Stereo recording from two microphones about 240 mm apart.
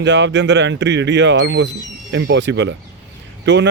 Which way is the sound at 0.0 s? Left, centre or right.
Right.